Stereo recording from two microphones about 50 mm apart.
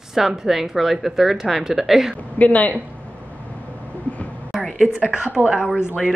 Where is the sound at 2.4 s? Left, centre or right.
Left.